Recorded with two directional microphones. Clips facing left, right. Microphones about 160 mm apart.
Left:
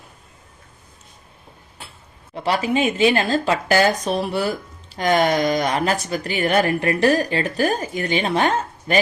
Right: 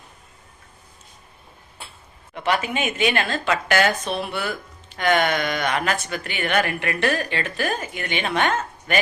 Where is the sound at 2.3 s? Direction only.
35° left (ahead or behind).